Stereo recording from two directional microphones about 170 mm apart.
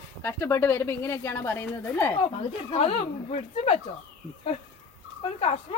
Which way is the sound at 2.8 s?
35° left (ahead or behind).